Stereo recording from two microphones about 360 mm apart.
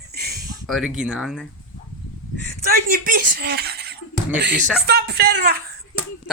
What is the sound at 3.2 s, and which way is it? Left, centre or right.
Speech, right.